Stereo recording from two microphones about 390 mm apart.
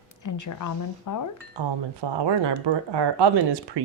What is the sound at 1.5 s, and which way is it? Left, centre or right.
Speech, right.